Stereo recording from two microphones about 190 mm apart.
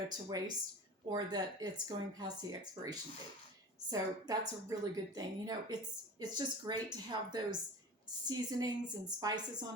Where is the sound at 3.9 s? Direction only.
20° right (ahead or behind).